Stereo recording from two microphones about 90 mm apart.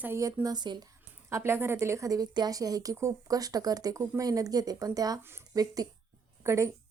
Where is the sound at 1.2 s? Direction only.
30° right (ahead or behind).